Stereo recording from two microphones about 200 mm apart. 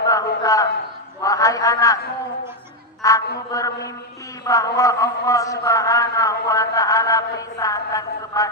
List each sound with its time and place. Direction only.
0.1 s a sound: 15° left (ahead or behind)
1.2 s a man's voice: 15° left (ahead or behind)
3.0 s a woman's voice: 15° left (ahead or behind)